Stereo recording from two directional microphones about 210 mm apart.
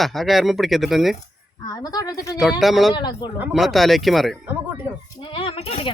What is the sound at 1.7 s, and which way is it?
Speech, 20° left (ahead or behind).